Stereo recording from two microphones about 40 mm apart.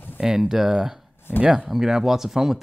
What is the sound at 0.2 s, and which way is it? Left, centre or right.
Speech, centre.